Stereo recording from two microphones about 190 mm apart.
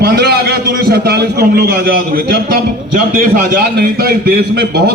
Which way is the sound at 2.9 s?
45° right (ahead or behind).